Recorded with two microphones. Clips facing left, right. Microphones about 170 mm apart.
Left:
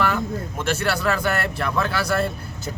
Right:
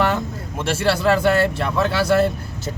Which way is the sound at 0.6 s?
30° right (ahead or behind).